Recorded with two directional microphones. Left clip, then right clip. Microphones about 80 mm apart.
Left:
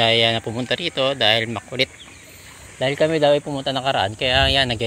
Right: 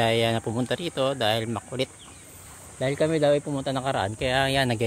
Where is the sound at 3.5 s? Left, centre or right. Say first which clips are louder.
Left 6 dB; right.